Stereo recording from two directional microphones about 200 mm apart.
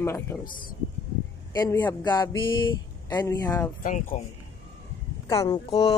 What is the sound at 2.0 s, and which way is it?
Music, 20° left (ahead or behind).